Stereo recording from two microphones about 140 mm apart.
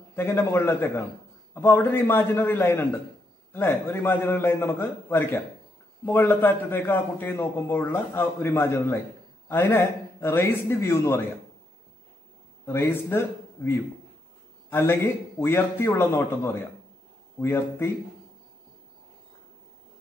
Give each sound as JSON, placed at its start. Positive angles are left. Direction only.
{"t": 0.1, "sound": "a man's voice", "side_deg": 15}
{"t": 12.6, "sound": "a man's voice", "side_deg": 15}